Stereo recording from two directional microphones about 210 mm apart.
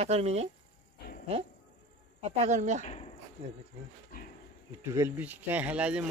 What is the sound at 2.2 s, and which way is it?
Speech, 35° right (ahead or behind).